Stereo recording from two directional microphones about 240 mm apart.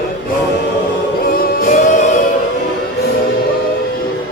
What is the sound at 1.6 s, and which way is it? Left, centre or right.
Music, left.